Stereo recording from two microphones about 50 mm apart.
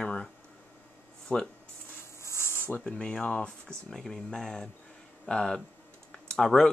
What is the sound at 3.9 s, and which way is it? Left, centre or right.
Speech, centre.